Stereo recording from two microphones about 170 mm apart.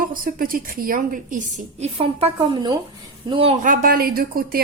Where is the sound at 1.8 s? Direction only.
35° right (ahead or behind).